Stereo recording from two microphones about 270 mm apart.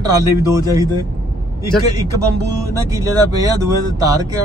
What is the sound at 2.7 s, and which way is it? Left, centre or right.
Speech, centre.